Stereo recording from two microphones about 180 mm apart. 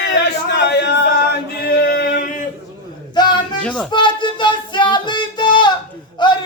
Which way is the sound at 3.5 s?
5° left (ahead or behind).